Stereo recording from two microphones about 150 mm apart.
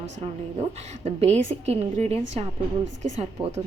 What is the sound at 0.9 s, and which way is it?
A woman's voice, 45° right (ahead or behind).